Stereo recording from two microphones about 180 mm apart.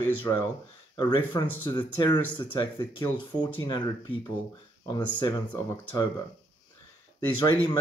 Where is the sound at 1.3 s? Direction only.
20° left (ahead or behind).